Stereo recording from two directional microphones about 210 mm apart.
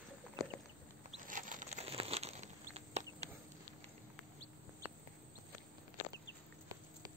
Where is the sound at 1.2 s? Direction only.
40° right (ahead or behind).